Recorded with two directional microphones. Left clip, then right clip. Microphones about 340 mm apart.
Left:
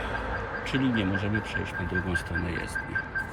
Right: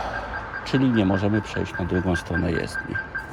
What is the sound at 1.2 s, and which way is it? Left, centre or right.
Speech, centre.